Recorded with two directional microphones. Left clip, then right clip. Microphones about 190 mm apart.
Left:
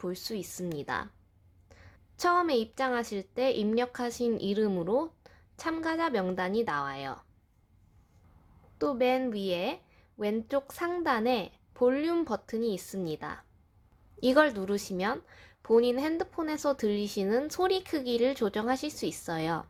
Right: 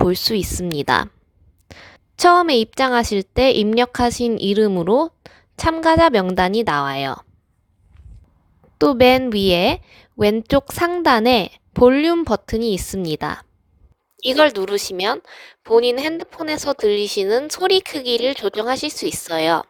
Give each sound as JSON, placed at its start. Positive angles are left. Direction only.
{"t": 0.0, "sound": "a woman's voice", "side_deg": -50}
{"t": 8.8, "sound": "a woman's voice", "side_deg": -50}